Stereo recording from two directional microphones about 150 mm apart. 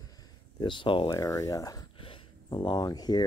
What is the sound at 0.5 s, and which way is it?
Speech, 35° left (ahead or behind).